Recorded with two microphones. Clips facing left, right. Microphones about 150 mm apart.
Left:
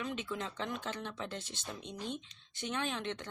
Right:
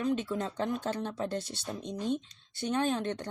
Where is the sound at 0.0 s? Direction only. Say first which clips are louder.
Right 8 dB; 40° right (ahead or behind).